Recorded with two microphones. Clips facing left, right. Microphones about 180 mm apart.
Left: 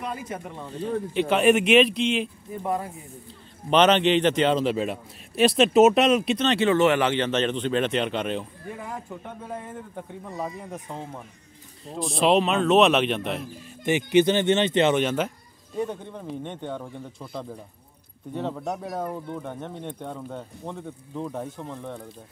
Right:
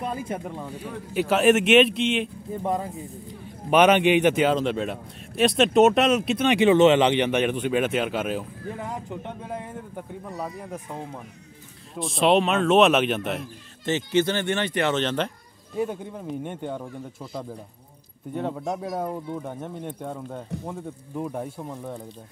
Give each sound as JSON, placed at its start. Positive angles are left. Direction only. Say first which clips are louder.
{"t": 0.0, "sound": "speech", "louder": "right 3 dB", "side_deg": -30}
{"t": 0.7, "sound": "a man's voice", "louder": "left 6 dB", "side_deg": -10}
{"t": 2.6, "sound": "speech", "louder": "right 1 dB", "side_deg": -20}
{"t": 3.7, "sound": "a man's voice", "louder": "right 1 dB", "side_deg": -10}
{"t": 6.4, "sound": "speech", "louder": "right 6 dB", "side_deg": -15}
{"t": 8.9, "sound": "a man's voice", "louder": "right 2 dB", "side_deg": -20}
{"t": 13.8, "sound": "speech", "louder": "left 3 dB", "side_deg": 15}
{"t": 15.8, "sound": "speech", "louder": "right 2 dB", "side_deg": -5}